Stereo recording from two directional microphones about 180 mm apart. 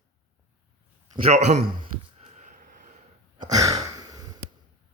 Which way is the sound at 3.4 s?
20° right (ahead or behind).